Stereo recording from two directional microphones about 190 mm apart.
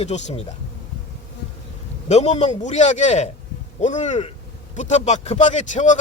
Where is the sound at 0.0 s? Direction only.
35° left (ahead or behind).